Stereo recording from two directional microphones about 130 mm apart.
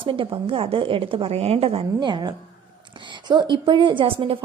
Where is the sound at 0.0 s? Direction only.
40° right (ahead or behind).